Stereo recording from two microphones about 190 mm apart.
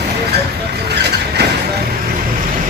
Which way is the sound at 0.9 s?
60° right (ahead or behind).